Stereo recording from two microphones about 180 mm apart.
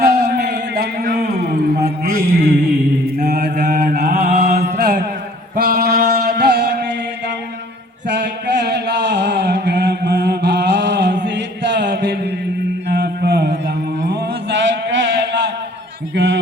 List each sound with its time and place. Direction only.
0.0 s a sound: 65° right (ahead or behind)
2.0 s mantra: 55° right (ahead or behind)
3.2 s mantra: 65° right (ahead or behind)
4.5 s mantra: 40° right (ahead or behind)
4.8 s mantra: 65° right (ahead or behind)
8.0 s a sound: 75° right (ahead or behind)